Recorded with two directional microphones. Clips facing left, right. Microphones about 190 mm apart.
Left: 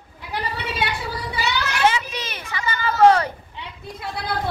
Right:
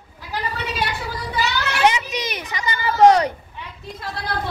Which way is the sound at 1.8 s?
15° right (ahead or behind).